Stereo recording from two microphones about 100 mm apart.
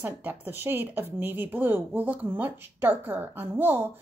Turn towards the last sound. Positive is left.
turn(degrees=-20)  # may be behind; listen again after turning